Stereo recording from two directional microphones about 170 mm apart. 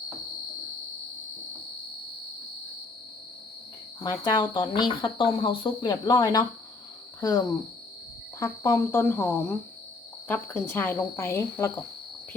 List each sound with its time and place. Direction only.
4.0 s speech: 25° left (ahead or behind)